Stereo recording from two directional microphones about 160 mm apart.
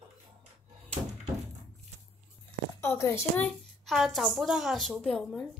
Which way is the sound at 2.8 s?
15° left (ahead or behind).